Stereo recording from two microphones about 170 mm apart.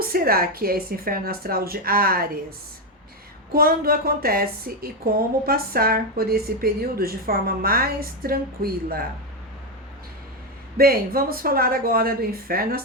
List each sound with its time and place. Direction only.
0.0 s a woman's voice: 60° right (ahead or behind)
3.5 s a woman's voice: 60° right (ahead or behind)
10.8 s a woman's voice: 60° right (ahead or behind)